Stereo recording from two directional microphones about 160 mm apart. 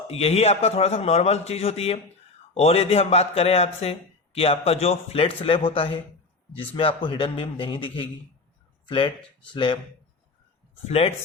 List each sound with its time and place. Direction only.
0.1 s a man's voice: 40° left (ahead or behind)
10.8 s a man's voice: 40° left (ahead or behind)